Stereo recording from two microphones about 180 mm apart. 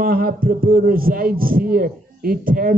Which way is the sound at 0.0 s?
55° right (ahead or behind).